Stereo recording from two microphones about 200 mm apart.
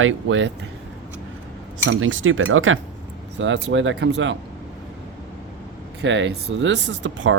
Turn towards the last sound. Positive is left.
turn(degrees=-65)  # may be behind; listen again after turning